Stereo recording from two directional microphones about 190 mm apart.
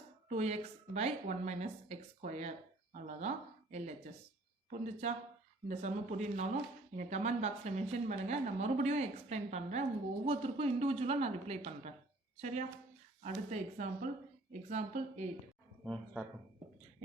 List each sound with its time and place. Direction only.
0.3 s speech: 35° right (ahead or behind)
13.2 s speech: 40° right (ahead or behind)
15.8 s speech: 5° left (ahead or behind)